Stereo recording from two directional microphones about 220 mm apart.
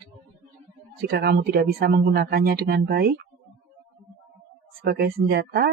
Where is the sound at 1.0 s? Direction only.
45° right (ahead or behind).